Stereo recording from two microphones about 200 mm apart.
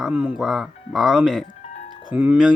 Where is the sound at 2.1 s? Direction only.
5° right (ahead or behind).